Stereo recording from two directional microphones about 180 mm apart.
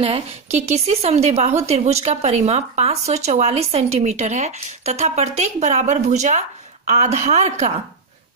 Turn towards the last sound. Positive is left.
turn(degrees=-40)  # may be behind; listen again after turning